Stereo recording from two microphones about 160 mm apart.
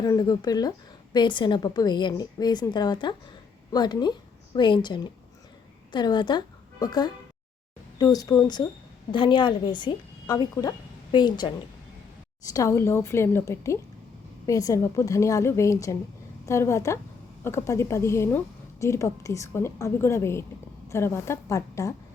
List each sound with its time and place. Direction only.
0.0 s a woman's voice: 25° left (ahead or behind)
12.5 s a woman's voice: 20° left (ahead or behind)